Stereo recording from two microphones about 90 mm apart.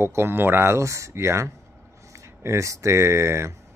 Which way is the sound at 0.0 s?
25° right (ahead or behind).